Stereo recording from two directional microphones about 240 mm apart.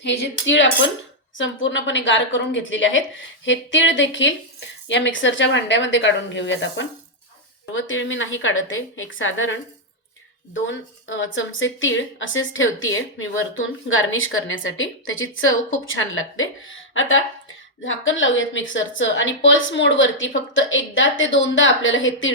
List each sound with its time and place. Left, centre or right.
0.0 s a woman's voice: left